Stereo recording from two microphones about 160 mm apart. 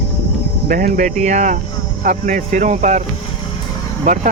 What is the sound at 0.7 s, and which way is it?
Speech, 60° right (ahead or behind).